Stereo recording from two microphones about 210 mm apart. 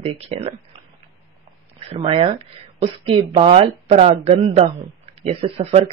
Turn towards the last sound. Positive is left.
turn(degrees=-25)  # may be behind; listen again after turning